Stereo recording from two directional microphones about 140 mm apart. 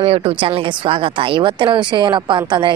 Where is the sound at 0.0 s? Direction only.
40° right (ahead or behind).